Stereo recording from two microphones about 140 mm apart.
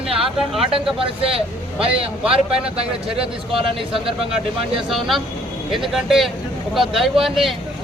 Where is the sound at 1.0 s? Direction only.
40° right (ahead or behind).